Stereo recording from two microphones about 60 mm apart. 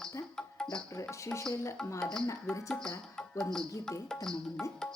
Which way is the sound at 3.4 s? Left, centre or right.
Centre.